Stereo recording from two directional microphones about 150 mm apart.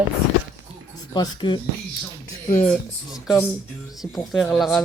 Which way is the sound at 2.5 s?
55° left (ahead or behind).